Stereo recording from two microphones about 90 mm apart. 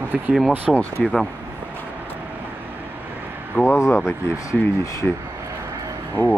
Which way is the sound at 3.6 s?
30° left (ahead or behind).